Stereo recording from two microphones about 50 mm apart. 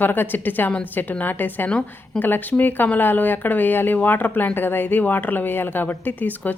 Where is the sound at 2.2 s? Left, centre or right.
Left.